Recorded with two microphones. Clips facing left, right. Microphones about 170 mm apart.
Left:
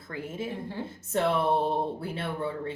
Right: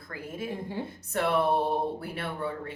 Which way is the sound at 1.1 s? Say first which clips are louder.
Left 2 dB; 25° left (ahead or behind).